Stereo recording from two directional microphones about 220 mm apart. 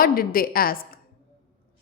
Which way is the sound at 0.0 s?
40° left (ahead or behind).